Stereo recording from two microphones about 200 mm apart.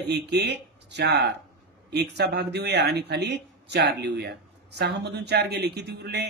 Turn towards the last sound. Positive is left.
turn(degrees=-55)  # may be behind; listen again after turning